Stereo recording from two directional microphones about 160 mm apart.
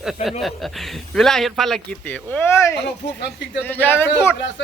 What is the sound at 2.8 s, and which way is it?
Speech, 90° left.